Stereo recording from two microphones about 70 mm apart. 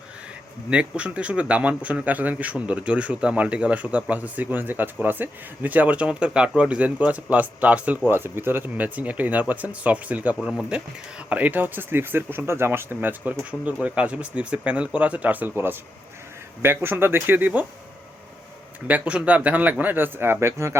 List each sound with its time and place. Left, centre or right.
0.7 s speech: centre
8.1 s speech: right
18.9 s speech: centre; by 20.7 s right